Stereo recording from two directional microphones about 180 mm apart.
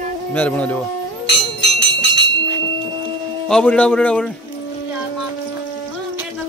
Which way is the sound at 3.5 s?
5° left (ahead or behind).